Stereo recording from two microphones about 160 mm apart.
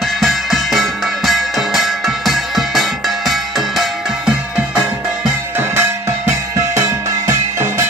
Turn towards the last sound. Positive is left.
turn(degrees=-15)  # may be behind; listen again after turning